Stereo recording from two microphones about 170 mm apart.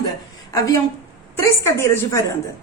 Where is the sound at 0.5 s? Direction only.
20° left (ahead or behind).